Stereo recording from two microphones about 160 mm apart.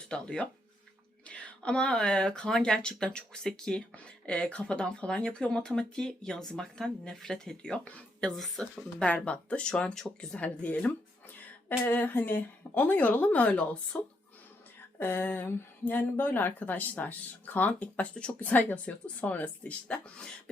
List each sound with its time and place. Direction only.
0.1 s speech: 5° left (ahead or behind)